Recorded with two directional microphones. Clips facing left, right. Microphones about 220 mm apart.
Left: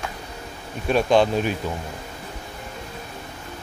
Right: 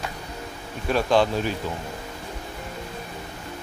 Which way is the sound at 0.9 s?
20° left (ahead or behind).